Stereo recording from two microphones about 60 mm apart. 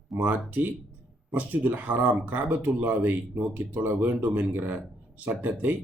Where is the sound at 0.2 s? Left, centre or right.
Right.